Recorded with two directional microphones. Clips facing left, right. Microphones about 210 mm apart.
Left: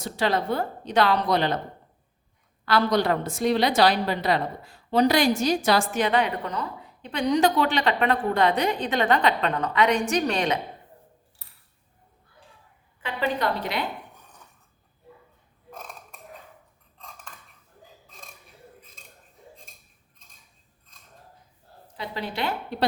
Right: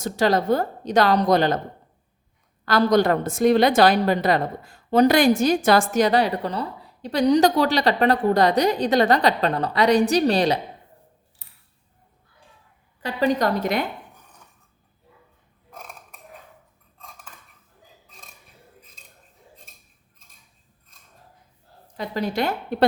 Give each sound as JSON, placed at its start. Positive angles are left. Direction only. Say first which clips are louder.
{"t": 0.0, "sound": "a woman's voice", "louder": "right 5 dB", "side_deg": -40}
{"t": 2.6, "sound": "a woman's voice", "louder": "right 4 dB", "side_deg": -45}
{"t": 13.0, "sound": "a woman's voice", "louder": "right 6 dB", "side_deg": -40}
{"t": 21.9, "sound": "a woman's voice", "louder": "right 6 dB", "side_deg": -45}